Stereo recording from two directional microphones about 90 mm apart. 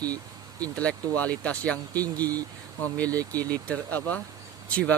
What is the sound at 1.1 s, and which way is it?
Speech, 15° left (ahead or behind).